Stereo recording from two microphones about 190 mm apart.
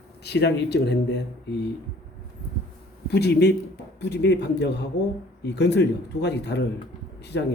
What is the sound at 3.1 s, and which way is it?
Speech, 60° left (ahead or behind).